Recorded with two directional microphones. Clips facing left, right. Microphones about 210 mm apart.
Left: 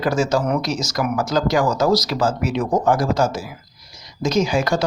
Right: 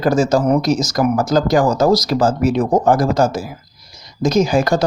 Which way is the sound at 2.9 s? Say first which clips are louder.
Right 4 dB; 50° right (ahead or behind).